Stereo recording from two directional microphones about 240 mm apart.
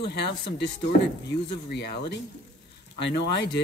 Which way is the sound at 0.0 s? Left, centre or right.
Left.